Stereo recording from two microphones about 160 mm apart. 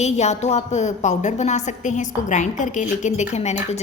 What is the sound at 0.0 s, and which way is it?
A woman's voice, 45° left (ahead or behind).